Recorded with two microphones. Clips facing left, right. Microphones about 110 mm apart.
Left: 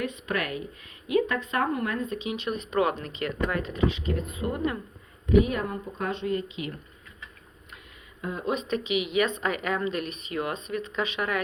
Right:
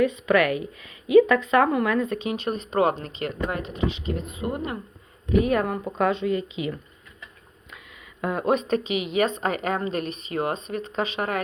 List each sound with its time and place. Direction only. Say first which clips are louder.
0.3 s speech: right 9 dB; 80° right
2.1 s a woman's voice: right 3 dB; 45° right (ahead or behind); by 4.8 s 25° right (ahead or behind)
5.5 s speech: right 7 dB; 65° right (ahead or behind); by 6.4 s 85° right
8.2 s a woman's voice: right 7 dB; 65° right (ahead or behind); by 11.4 s 35° right (ahead or behind)